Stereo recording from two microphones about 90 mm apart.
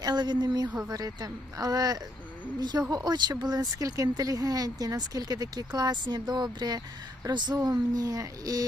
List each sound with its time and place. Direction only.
0.0 s speech: 50° right (ahead or behind)